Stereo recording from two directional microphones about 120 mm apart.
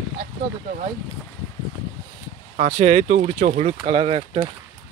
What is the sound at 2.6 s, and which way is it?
Speech, 60° right (ahead or behind).